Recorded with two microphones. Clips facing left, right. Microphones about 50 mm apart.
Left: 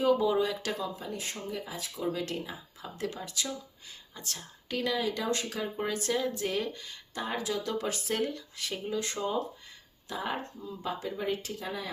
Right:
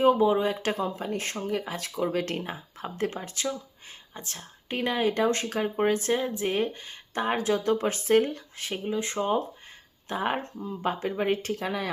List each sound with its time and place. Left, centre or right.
0.0 s speech: right
10.1 s speech: right
11.2 s speech: right